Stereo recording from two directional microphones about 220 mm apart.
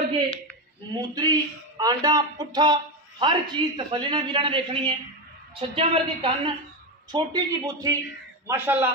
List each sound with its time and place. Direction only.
0.9 s a man's voice: 15° right (ahead or behind)